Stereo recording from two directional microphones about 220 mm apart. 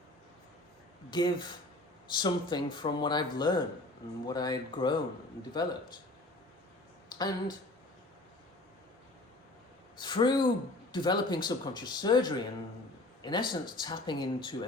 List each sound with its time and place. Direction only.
1.1 s speech: 20° left (ahead or behind)
7.2 s speech: 20° left (ahead or behind)
10.0 s speech: 20° left (ahead or behind)